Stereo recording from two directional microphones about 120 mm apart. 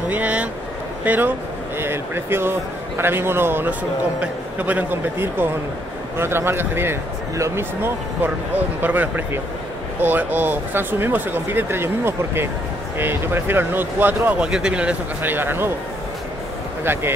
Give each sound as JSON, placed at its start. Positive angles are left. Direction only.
{"t": 0.1, "sound": "a sound", "side_deg": -10}
{"t": 1.0, "sound": "a man's voice", "side_deg": -15}
{"t": 16.8, "sound": "speech", "side_deg": -20}